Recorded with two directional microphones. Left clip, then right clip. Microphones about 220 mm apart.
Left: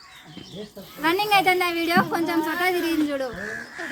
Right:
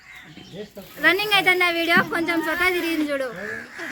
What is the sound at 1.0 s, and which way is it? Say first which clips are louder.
A woman's voice: right 1 dB; 20° left (ahead or behind).